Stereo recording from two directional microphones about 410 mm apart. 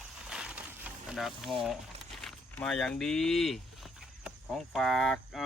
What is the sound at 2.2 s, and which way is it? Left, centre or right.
Speech, centre.